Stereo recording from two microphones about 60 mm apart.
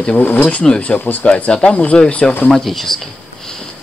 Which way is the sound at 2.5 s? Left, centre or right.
Centre.